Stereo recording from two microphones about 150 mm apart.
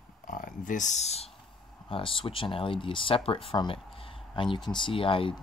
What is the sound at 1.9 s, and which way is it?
Speech, 35° left (ahead or behind).